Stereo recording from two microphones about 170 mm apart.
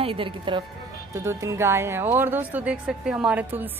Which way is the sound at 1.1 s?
15° right (ahead or behind).